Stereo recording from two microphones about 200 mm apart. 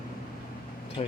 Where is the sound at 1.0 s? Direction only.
35° left (ahead or behind).